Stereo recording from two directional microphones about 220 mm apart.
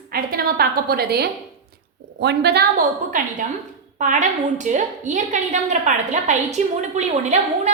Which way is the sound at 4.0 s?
35° right (ahead or behind).